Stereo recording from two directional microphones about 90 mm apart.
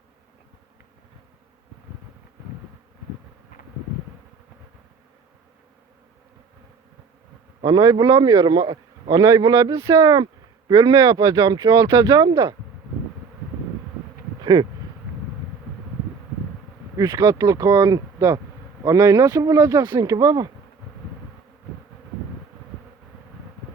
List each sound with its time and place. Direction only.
7.6 s speech: 50° right (ahead or behind); by 10.1 s 35° right (ahead or behind)
10.7 s speech: 50° right (ahead or behind)
14.4 s speech: 55° right (ahead or behind)
17.0 s speech: 45° right (ahead or behind)